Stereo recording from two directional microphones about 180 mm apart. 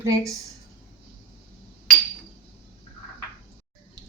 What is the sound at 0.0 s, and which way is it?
Speech, 20° right (ahead or behind).